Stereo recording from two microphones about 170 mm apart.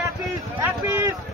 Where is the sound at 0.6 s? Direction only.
15° right (ahead or behind).